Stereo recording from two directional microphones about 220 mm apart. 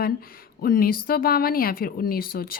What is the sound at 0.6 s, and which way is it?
A woman's voice, 40° left (ahead or behind).